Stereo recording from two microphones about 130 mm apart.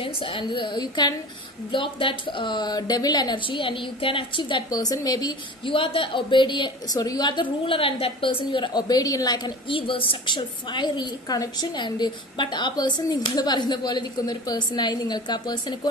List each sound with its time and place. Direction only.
0.0 s a woman's voice: 45° left (ahead or behind)
5.7 s a woman's voice: 40° left (ahead or behind)
7.6 s a woman's voice: 45° left (ahead or behind)